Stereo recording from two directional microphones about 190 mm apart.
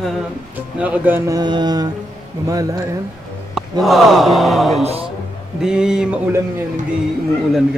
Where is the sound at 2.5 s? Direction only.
20° right (ahead or behind).